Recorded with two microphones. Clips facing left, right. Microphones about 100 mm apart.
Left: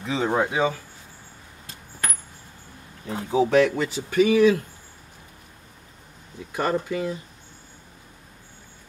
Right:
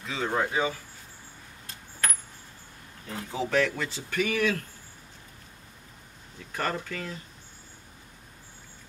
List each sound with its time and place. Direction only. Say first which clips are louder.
0.0 s speech: left 5 dB; 20° left (ahead or behind)
3.1 s speech: left 9 dB; 20° left (ahead or behind)
6.5 s speech: left 7 dB; 15° left (ahead or behind)